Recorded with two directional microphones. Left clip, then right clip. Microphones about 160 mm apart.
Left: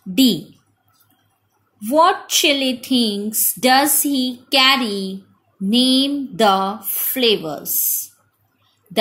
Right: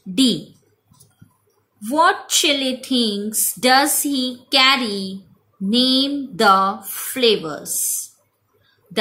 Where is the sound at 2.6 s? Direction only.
10° left (ahead or behind).